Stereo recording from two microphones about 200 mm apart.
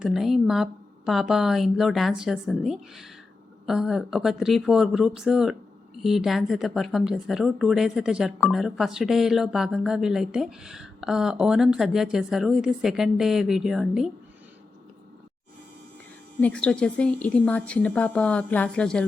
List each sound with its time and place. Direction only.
0.0 s speech: centre (ahead or behind)
16.4 s speech: 5° left (ahead or behind)